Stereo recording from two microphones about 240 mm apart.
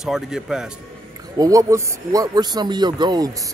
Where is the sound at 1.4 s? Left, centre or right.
Centre.